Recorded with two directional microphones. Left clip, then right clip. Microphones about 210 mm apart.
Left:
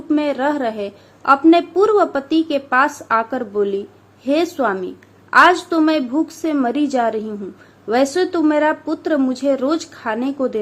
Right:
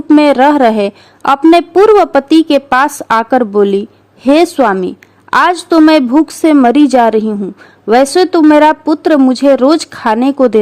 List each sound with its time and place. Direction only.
0.1 s a woman's voice: 50° right (ahead or behind)